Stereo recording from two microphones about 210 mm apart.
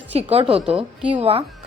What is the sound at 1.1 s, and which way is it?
Speech, 25° right (ahead or behind).